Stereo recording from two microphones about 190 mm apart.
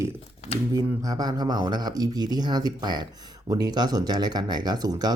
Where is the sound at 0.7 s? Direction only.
20° right (ahead or behind).